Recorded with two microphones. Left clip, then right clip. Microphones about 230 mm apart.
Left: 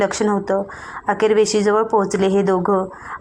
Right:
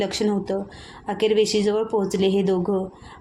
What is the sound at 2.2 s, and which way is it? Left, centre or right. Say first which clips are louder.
Speech: left 4 dB; left.